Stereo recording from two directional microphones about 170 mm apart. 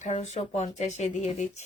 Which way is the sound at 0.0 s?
45° left (ahead or behind).